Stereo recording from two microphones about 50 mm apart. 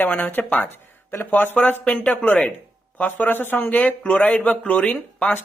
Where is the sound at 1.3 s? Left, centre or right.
Left.